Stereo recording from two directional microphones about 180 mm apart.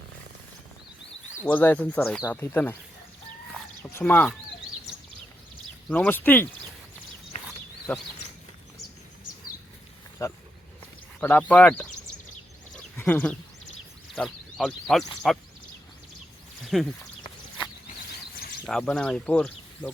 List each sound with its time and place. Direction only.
1.5 s speech: 10° left (ahead or behind)
3.8 s speech: 10° left (ahead or behind)
5.9 s speech: 10° left (ahead or behind)
7.9 s speech: 5° left (ahead or behind)
10.2 s speech: 15° left (ahead or behind)
12.7 s a sound: 10° left (ahead or behind)
14.2 s speech: centre (ahead or behind)
16.7 s speech: centre (ahead or behind)
18.6 s speech: 5° left (ahead or behind)